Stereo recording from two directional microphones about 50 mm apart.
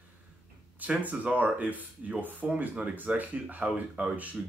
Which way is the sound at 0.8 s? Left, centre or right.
Right.